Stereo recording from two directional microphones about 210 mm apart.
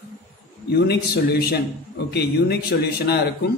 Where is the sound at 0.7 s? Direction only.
50° left (ahead or behind).